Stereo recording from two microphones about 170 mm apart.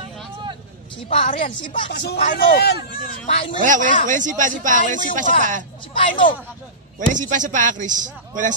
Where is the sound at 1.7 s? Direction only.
70° left (ahead or behind).